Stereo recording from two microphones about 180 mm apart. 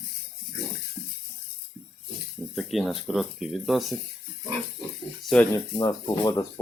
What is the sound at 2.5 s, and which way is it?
Speech, centre (ahead or behind).